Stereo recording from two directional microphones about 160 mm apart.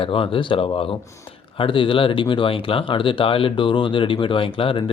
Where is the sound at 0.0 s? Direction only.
35° left (ahead or behind).